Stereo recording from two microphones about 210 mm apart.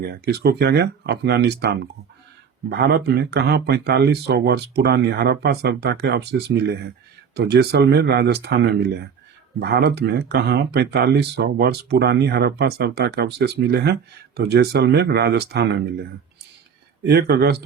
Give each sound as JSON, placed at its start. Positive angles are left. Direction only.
{"t": 0.0, "sound": "speech", "side_deg": -50}
{"t": 17.0, "sound": "speech", "side_deg": -50}